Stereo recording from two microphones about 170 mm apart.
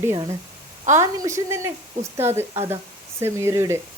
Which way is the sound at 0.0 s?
15° right (ahead or behind).